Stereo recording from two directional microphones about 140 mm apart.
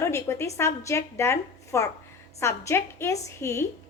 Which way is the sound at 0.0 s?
20° left (ahead or behind).